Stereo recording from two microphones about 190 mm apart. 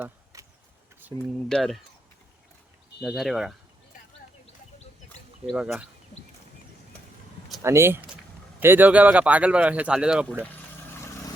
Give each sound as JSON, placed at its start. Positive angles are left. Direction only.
{"t": 0.3, "sound": "vehicle", "side_deg": -15}
{"t": 1.5, "sound": "speech", "side_deg": 0}
{"t": 3.0, "sound": "speech", "side_deg": 0}
{"t": 4.4, "sound": "bird", "side_deg": 35}
{"t": 5.5, "sound": "speech", "side_deg": 0}
{"t": 7.6, "sound": "speech", "side_deg": -15}